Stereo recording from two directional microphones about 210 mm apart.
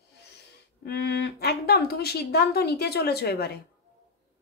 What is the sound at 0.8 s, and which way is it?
Speech, 55° left (ahead or behind).